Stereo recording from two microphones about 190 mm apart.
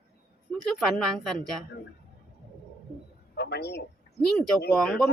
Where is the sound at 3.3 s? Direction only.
60° left (ahead or behind).